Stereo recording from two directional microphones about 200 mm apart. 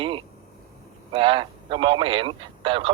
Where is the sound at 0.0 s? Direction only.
25° right (ahead or behind).